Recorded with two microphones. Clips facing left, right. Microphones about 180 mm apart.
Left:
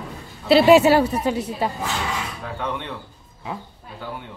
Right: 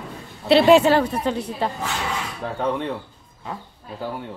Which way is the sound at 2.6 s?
35° right (ahead or behind).